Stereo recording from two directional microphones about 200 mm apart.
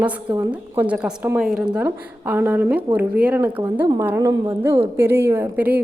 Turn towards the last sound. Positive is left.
turn(degrees=-10)  # may be behind; listen again after turning